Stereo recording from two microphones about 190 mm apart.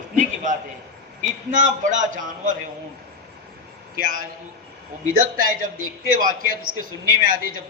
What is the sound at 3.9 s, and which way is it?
A woman's voice, 50° right (ahead or behind).